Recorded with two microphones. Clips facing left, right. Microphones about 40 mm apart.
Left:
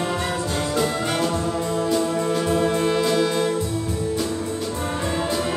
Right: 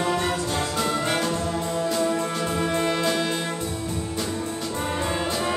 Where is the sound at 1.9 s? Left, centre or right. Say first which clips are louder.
Left 4 dB; centre.